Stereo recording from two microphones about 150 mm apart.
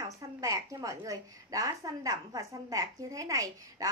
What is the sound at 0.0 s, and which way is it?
A woman's voice, 20° right (ahead or behind).